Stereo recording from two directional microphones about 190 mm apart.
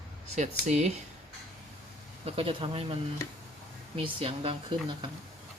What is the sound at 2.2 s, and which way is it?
Speech, 30° right (ahead or behind).